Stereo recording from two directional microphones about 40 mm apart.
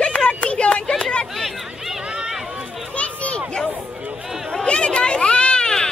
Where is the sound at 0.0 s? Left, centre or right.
Left.